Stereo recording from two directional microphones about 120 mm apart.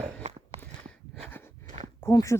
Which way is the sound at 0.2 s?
65° right (ahead or behind).